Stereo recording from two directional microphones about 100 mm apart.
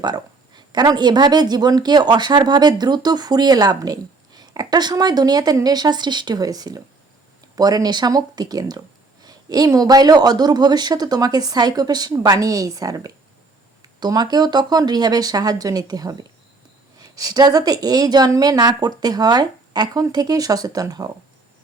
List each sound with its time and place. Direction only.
0.0 s a woman's voice: 45° right (ahead or behind)